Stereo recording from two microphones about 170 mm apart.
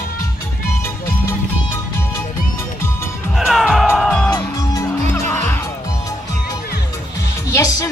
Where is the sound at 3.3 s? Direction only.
Centre (ahead or behind); by 5.4 s 15° left (ahead or behind).